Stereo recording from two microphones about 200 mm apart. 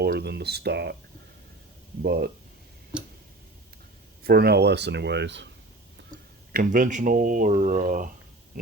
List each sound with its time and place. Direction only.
0.0 s speech: 55° right (ahead or behind)
2.0 s speech: 50° right (ahead or behind)
2.9 s tick-tock: 5° right (ahead or behind)
4.2 s speech: 50° right (ahead or behind)
6.5 s speech: 40° right (ahead or behind)